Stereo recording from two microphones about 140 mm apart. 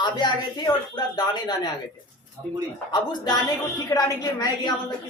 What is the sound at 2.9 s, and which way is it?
A man's voice, 30° left (ahead or behind).